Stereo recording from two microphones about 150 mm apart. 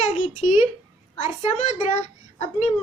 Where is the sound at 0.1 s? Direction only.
45° left (ahead or behind).